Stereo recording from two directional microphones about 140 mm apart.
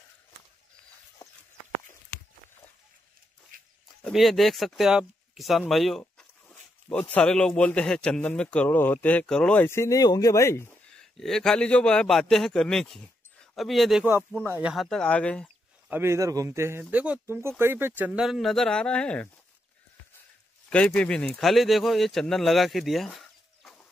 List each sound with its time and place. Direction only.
4.0 s a man's voice: centre (ahead or behind); by 10.8 s 20° left (ahead or behind)
10.9 s a man's voice: 5° left (ahead or behind)
14.4 s a man's voice: 10° right (ahead or behind); by 15.4 s 10° left (ahead or behind)
15.9 s speech: 20° right (ahead or behind); by 19.2 s 5° left (ahead or behind)
20.7 s speech: 10° left (ahead or behind)